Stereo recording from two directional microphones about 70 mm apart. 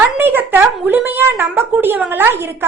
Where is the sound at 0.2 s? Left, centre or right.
Right.